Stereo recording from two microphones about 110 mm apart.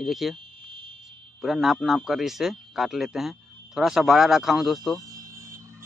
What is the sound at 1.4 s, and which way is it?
A man's voice, centre (ahead or behind).